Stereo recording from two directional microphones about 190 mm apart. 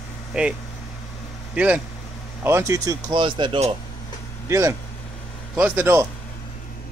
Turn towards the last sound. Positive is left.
turn(degrees=-10)  # may be behind; listen again after turning